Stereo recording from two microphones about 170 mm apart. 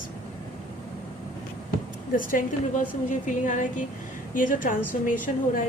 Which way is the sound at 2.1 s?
55° left (ahead or behind).